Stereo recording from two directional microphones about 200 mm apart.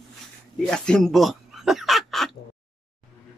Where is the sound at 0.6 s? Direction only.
5° left (ahead or behind).